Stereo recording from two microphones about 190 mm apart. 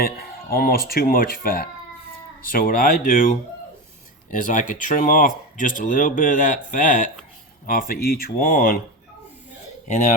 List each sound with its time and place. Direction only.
0.0 s speech: 50° left (ahead or behind)
4.3 s speech: 45° left (ahead or behind)
9.8 s speech: 40° left (ahead or behind)